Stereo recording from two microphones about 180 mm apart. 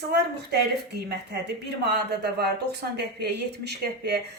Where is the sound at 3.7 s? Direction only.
65° right (ahead or behind).